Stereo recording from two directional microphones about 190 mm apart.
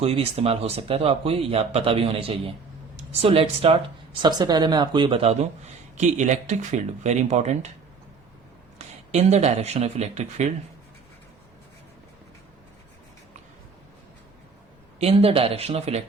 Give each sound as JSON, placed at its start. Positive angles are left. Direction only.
{"t": 0.0, "sound": "a man's voice", "side_deg": -30}
{"t": 8.8, "sound": "speech", "side_deg": -35}
{"t": 14.9, "sound": "a man's voice", "side_deg": -30}